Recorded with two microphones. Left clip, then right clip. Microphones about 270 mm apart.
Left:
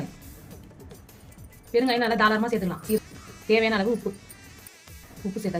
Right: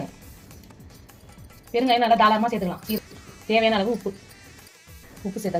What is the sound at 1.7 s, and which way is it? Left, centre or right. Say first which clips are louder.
Speech: right 4 dB; left.